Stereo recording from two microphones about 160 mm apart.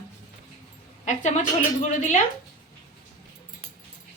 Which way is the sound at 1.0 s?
50° left (ahead or behind).